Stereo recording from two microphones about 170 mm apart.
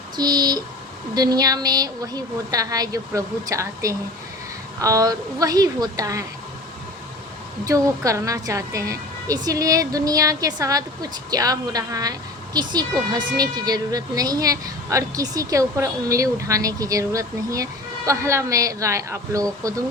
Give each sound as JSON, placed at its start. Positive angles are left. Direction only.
{"t": 0.2, "sound": "a woman's voice", "side_deg": -25}
{"t": 7.6, "sound": "a woman's voice", "side_deg": -20}